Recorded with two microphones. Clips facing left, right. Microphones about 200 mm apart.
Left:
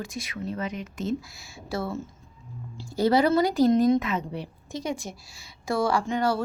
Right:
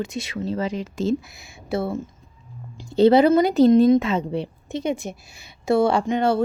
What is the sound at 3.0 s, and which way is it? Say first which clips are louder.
Speech: right 6 dB; 25° right (ahead or behind).